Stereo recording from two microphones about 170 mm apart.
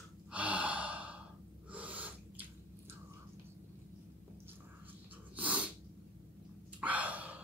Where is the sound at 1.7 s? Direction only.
10° right (ahead or behind).